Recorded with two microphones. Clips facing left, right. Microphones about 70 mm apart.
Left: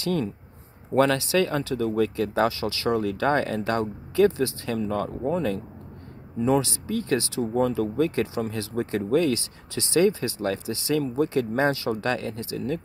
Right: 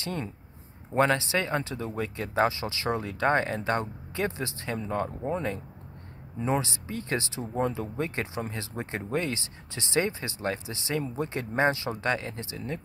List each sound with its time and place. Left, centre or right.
0.0 s speech: right